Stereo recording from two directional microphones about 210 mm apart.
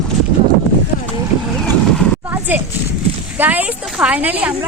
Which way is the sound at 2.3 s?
10° right (ahead or behind).